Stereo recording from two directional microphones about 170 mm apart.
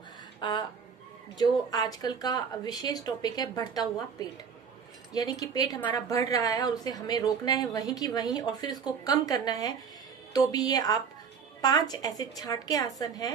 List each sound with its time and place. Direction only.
0.4 s speech: 25° left (ahead or behind)